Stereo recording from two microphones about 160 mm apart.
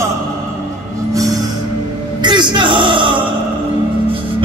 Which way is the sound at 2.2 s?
30° right (ahead or behind).